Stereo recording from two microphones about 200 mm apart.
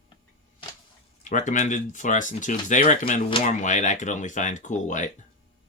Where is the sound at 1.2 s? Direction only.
40° left (ahead or behind).